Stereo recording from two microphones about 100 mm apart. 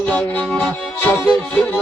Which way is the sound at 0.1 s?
15° left (ahead or behind).